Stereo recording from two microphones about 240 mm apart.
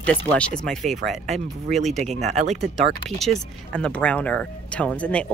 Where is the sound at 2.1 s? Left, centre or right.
Right.